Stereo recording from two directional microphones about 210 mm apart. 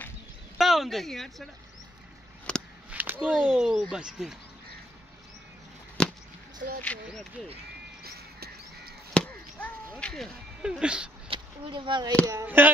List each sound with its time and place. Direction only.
0.6 s speech: centre (ahead or behind)
2.9 s speech: 5° right (ahead or behind)
6.0 s a sound: 5° left (ahead or behind)
6.8 s speech: 5° left (ahead or behind)
8.0 s music: 50° right (ahead or behind)
9.1 s chop: 5° left (ahead or behind)
11.2 s speech: 25° right (ahead or behind)